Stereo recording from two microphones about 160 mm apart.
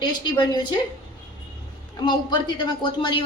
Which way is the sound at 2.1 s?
30° left (ahead or behind).